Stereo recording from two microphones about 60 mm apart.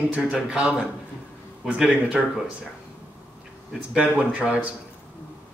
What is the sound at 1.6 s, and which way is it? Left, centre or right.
Speech, centre.